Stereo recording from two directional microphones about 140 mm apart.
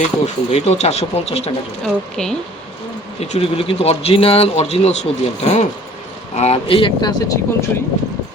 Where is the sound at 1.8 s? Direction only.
5° left (ahead or behind).